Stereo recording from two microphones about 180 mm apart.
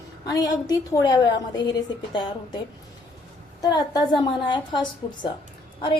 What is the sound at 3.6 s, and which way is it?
A woman's voice, 20° left (ahead or behind).